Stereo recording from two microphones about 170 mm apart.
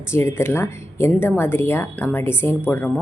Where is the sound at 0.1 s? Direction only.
15° left (ahead or behind).